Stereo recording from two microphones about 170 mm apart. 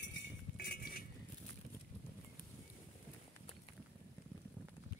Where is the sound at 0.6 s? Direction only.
60° left (ahead or behind).